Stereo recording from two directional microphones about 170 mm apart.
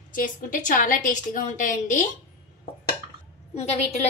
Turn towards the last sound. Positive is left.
turn(degrees=40)  # may be behind; listen again after turning